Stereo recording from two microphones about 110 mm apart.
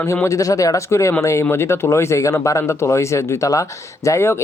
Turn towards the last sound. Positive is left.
turn(degrees=25)  # may be behind; listen again after turning